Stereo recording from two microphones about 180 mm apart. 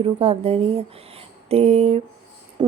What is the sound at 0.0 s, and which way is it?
Speech, 35° right (ahead or behind).